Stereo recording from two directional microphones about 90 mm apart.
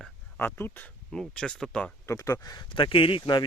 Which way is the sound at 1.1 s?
5° left (ahead or behind).